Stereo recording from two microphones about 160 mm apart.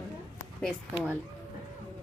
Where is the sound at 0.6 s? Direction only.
5° right (ahead or behind).